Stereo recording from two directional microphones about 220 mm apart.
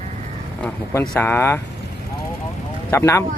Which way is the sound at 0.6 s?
10° left (ahead or behind).